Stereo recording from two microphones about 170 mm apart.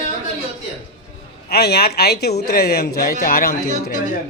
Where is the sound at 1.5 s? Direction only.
65° left (ahead or behind).